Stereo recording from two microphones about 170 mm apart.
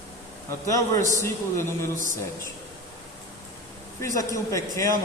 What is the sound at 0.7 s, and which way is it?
Speech, 20° left (ahead or behind).